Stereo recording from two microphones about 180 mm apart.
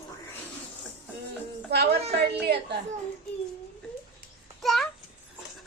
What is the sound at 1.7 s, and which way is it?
Speech, 65° right (ahead or behind).